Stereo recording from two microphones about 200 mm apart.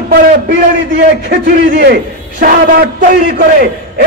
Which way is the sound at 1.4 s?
45° right (ahead or behind).